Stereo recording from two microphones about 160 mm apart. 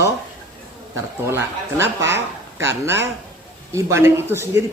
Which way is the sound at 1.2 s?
15° right (ahead or behind).